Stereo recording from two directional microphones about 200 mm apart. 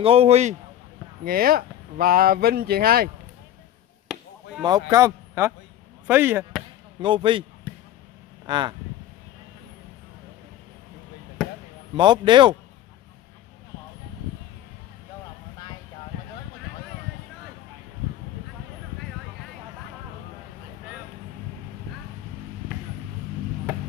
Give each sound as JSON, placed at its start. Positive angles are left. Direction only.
{"t": 0.0, "sound": "a man's voice", "side_deg": -30}
{"t": 1.2, "sound": "speech", "side_deg": -45}
{"t": 4.6, "sound": "speech", "side_deg": -20}
{"t": 7.0, "sound": "speech", "side_deg": -25}
{"t": 8.5, "sound": "speech", "side_deg": -25}
{"t": 11.9, "sound": "speech", "side_deg": -25}